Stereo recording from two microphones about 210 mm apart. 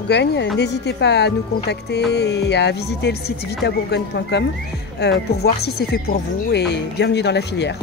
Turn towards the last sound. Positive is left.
turn(degrees=55)  # may be behind; listen again after turning